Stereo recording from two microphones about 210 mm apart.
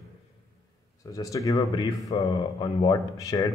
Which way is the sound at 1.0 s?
15° left (ahead or behind).